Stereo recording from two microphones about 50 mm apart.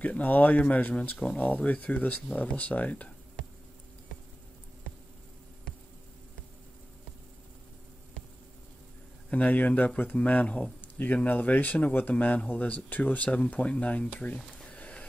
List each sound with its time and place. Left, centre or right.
0.2 s speech: left
9.3 s speech: left
11.2 s speech: left
14.7 s music: left